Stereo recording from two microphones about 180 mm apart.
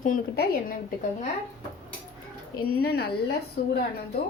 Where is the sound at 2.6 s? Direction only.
60° left (ahead or behind).